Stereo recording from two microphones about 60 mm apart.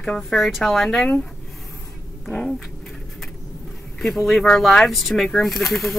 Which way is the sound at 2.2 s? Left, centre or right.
Centre.